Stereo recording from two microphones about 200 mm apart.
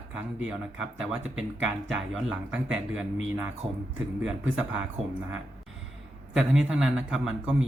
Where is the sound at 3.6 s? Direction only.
30° right (ahead or behind).